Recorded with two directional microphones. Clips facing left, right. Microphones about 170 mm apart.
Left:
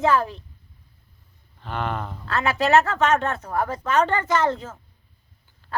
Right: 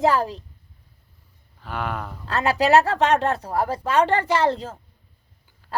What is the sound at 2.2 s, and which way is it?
Speech, 35° right (ahead or behind).